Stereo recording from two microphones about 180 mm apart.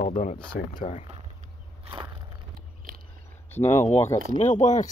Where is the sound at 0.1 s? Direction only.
40° left (ahead or behind).